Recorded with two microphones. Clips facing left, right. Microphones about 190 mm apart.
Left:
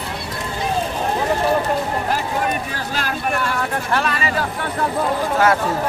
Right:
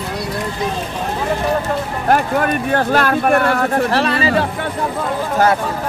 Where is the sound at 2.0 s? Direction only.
60° right (ahead or behind).